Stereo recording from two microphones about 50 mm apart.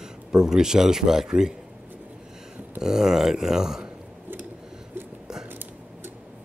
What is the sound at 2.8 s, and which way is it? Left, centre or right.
Speech, centre.